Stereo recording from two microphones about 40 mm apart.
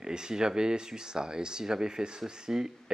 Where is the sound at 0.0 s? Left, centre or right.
Centre.